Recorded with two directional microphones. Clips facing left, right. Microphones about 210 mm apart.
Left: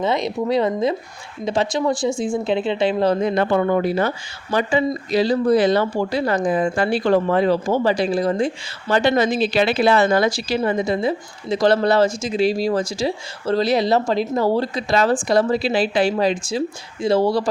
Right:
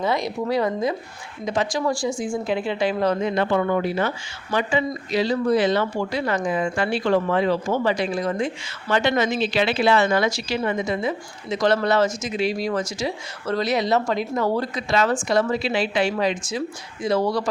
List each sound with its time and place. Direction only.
0.0 s a woman's voice: 20° left (ahead or behind)